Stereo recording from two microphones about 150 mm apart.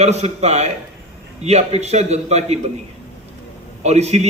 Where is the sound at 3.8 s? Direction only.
45° right (ahead or behind).